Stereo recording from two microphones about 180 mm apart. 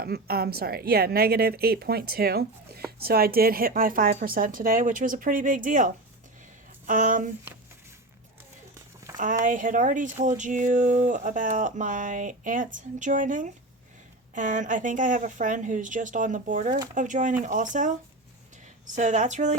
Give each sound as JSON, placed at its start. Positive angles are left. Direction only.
{"t": 0.0, "sound": "speech", "side_deg": -60}
{"t": 9.4, "sound": "speech", "side_deg": -45}
{"t": 18.9, "sound": "speech", "side_deg": -45}